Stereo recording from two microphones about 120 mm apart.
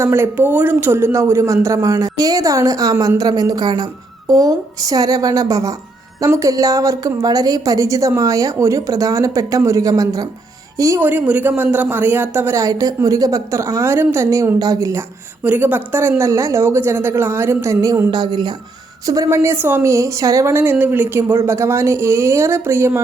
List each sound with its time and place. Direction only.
0.0 s a woman's voice: 20° right (ahead or behind)
11.0 s a woman's voice: 15° right (ahead or behind)
15.4 s a woman's voice: 15° right (ahead or behind)
18.1 s a woman's voice: 35° right (ahead or behind); by 23.0 s 20° right (ahead or behind)